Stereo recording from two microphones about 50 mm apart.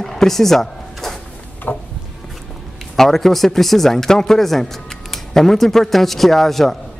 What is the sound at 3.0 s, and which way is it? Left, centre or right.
A man's voice, centre.